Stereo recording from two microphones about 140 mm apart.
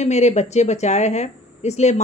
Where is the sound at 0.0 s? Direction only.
55° left (ahead or behind).